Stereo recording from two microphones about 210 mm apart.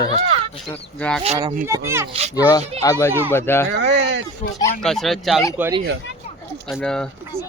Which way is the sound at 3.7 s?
60° right (ahead or behind).